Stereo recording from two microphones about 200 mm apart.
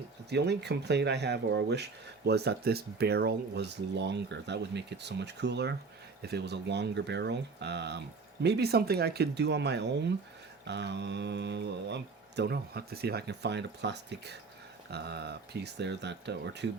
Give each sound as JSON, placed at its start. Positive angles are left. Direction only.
{"t": 0.3, "sound": "speech", "side_deg": -55}